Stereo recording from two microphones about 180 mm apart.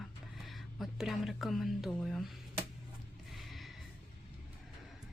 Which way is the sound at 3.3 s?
Centre (ahead or behind).